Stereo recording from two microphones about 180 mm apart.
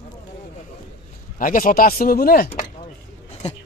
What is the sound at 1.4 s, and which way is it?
Speech, 50° left (ahead or behind).